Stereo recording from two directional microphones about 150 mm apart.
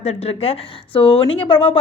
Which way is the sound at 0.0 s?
40° left (ahead or behind).